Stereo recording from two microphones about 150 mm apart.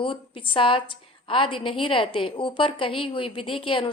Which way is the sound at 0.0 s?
35° left (ahead or behind).